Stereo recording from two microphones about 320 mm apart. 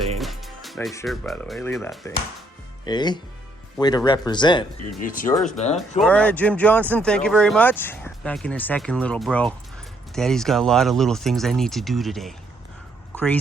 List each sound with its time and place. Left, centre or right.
0.2 s speech: centre
4.9 s speech: left
6.0 s speech: centre